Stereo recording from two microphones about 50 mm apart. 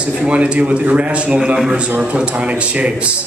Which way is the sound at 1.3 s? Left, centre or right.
Centre.